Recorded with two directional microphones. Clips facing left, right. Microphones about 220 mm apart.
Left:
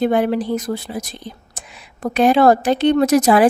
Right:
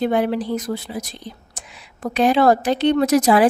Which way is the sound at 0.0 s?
50° left (ahead or behind).